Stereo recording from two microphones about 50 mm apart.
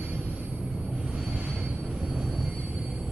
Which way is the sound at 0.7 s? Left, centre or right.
Right.